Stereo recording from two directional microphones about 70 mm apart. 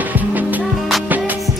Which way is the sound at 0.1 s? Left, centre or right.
Right.